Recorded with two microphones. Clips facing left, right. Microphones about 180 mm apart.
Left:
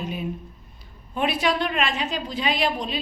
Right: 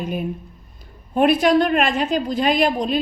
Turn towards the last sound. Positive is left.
turn(degrees=-45)  # may be behind; listen again after turning